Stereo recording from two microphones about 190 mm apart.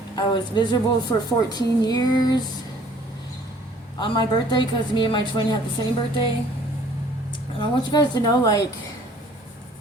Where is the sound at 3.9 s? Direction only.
25° left (ahead or behind).